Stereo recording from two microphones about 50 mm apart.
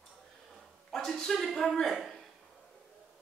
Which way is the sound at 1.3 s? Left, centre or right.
Centre.